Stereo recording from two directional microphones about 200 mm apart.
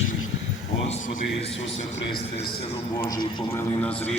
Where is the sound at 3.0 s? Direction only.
15° left (ahead or behind).